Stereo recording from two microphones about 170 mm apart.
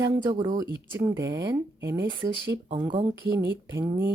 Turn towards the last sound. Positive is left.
turn(degrees=-15)  # may be behind; listen again after turning